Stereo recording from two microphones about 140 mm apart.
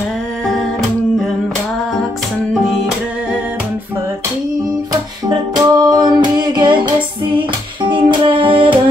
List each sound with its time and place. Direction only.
4.9 s music: 30° right (ahead or behind)